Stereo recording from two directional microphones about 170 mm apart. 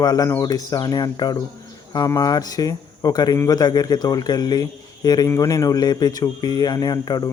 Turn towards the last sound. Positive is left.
turn(degrees=25)  # may be behind; listen again after turning